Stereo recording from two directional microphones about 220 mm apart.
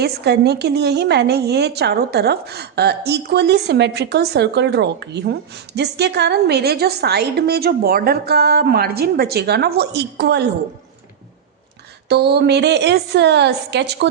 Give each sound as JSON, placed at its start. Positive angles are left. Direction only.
{"t": 0.0, "sound": "a woman's voice", "side_deg": -50}
{"t": 12.0, "sound": "a woman's voice", "side_deg": -50}